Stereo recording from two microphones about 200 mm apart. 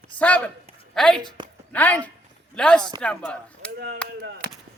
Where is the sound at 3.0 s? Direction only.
5° left (ahead or behind).